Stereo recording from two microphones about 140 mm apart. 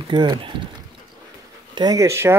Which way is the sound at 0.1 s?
35° right (ahead or behind).